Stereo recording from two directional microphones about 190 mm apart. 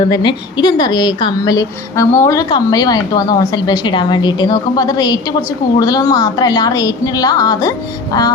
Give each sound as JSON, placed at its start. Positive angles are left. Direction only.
{"t": 0.1, "sound": "a woman's voice", "side_deg": 25}